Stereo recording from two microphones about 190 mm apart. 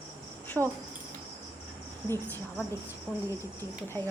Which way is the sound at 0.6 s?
Centre (ahead or behind).